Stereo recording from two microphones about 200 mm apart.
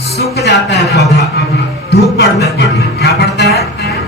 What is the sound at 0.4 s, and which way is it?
Speech, 60° left (ahead or behind).